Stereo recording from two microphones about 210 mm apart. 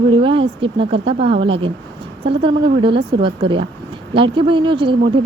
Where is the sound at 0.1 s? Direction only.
25° right (ahead or behind).